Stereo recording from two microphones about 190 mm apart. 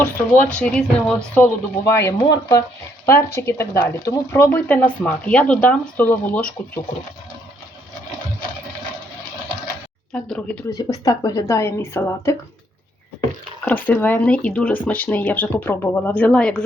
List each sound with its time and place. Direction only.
0.0 s speech: 10° left (ahead or behind)
10.1 s speech: 5° left (ahead or behind)
10.8 s speech: 20° left (ahead or behind)
13.7 s speech: 10° left (ahead or behind)